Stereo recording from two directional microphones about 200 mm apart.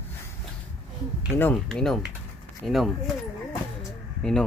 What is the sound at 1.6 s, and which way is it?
Speech, centre (ahead or behind).